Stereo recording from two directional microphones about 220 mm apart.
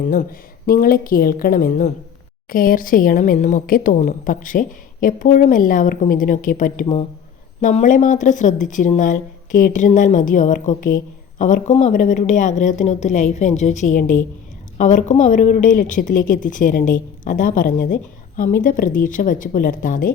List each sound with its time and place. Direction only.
0.1 s a woman's voice: 40° left (ahead or behind)